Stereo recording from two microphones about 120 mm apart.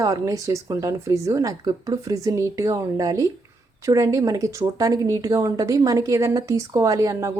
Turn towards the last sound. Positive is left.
turn(degrees=-25)  # may be behind; listen again after turning